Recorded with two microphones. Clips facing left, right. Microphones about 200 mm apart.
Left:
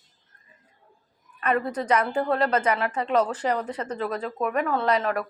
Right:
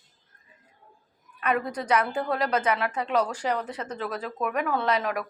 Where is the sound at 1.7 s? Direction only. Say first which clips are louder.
Left 2 dB; 10° right (ahead or behind).